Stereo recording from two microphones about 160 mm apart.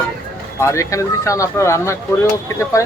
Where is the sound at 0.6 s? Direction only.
20° left (ahead or behind).